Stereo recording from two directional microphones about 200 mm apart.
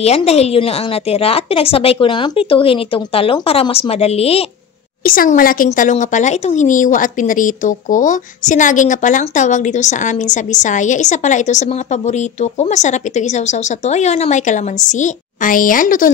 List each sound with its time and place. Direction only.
0.0 s a woman's voice: 30° left (ahead or behind)
5.0 s speech: 45° left (ahead or behind)